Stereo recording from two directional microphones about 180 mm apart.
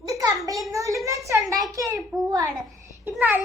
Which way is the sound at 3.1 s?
10° right (ahead or behind).